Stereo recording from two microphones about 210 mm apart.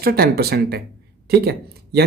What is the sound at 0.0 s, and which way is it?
Speech, 45° right (ahead or behind).